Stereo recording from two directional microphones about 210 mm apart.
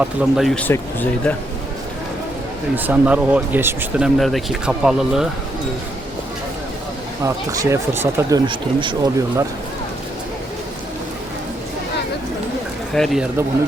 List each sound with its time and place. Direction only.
0.0 s speech: centre (ahead or behind)
2.7 s speech: 10° right (ahead or behind)
7.3 s speech: 15° right (ahead or behind)
12.9 s speech: centre (ahead or behind)